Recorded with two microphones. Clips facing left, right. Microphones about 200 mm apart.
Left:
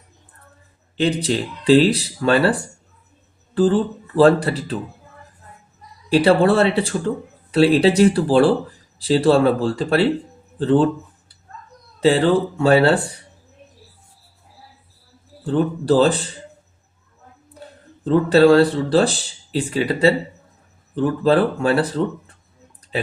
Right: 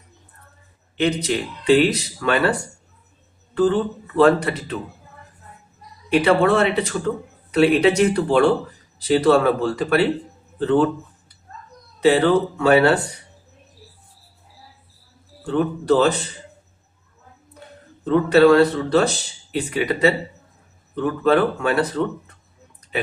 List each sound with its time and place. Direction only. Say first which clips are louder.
0.9 s speech: left 1 dB; 30° left (ahead or behind)
6.1 s speech: left 2 dB; 30° left (ahead or behind)
11.9 s speech: even; 30° left (ahead or behind)
15.4 s speech: left 1 dB; 30° left (ahead or behind)
18.0 s speech: left 1 dB; 30° left (ahead or behind)